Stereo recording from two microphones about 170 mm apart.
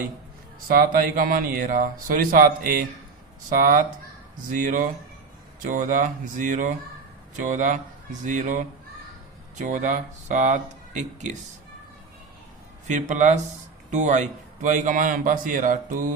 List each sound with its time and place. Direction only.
0.7 s a man's voice: 55° right (ahead or behind)
12.9 s a man's voice: 45° right (ahead or behind)